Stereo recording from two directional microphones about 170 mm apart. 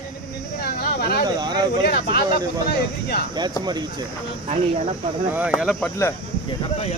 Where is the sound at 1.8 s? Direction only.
65° left (ahead or behind).